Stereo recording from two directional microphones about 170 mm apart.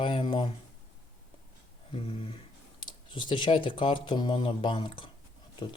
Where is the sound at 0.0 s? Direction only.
30° left (ahead or behind).